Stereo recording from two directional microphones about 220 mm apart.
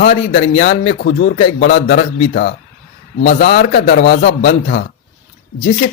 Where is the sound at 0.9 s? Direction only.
50° left (ahead or behind).